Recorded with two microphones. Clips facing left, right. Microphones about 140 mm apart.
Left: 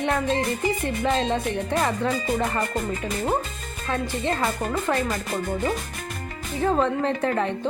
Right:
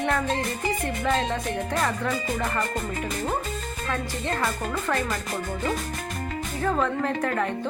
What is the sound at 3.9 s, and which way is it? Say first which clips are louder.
Music: left 4 dB; 20° left (ahead or behind).